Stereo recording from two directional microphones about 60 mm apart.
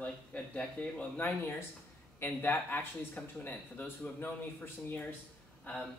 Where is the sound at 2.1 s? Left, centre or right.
Left.